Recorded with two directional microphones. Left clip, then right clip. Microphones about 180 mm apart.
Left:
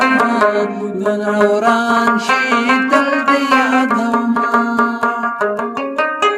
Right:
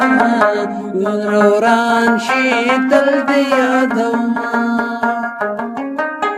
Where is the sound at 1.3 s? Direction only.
30° right (ahead or behind).